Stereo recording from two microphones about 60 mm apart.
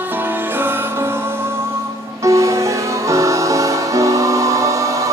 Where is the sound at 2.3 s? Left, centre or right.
Right.